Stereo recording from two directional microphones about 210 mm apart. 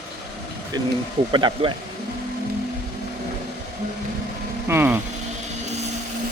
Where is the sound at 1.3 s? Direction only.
20° right (ahead or behind).